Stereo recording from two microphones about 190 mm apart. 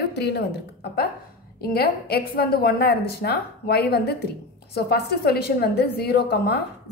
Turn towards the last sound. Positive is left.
turn(degrees=55)  # may be behind; listen again after turning